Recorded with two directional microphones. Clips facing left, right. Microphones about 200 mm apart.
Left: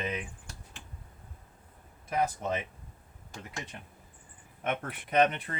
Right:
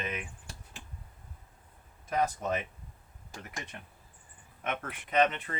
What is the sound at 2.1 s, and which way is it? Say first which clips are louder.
Speech: even; 15° left (ahead or behind).